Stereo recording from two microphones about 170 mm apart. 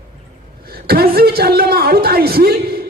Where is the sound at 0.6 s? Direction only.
65° right (ahead or behind).